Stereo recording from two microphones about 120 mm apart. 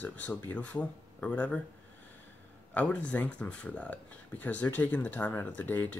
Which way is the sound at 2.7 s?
10° left (ahead or behind).